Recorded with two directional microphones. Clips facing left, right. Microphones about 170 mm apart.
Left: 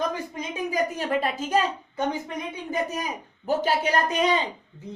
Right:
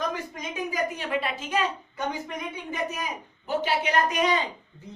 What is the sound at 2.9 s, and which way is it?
A child's voice, 40° left (ahead or behind).